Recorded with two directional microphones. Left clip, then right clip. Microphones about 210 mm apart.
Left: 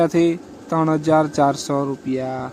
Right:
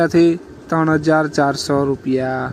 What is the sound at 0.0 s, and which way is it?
Speech, 15° right (ahead or behind).